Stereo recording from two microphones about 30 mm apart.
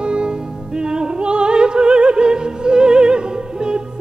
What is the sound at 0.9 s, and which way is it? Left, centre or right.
Opera, right.